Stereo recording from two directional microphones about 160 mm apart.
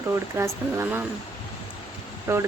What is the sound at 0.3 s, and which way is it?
Speech, 15° right (ahead or behind).